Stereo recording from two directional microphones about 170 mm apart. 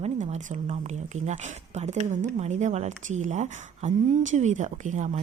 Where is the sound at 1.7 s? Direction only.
40° right (ahead or behind).